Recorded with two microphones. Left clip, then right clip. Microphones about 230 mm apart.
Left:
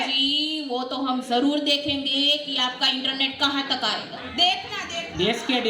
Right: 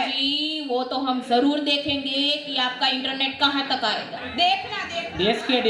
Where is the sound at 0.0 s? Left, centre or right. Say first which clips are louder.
Left 1 dB; left.